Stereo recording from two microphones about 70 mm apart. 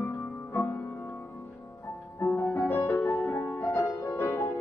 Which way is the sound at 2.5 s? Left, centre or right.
Left.